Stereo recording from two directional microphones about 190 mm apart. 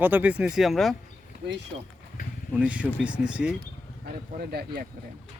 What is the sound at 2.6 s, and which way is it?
Speech, 5° right (ahead or behind).